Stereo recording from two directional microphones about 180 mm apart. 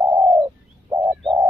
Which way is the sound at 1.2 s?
25° right (ahead or behind).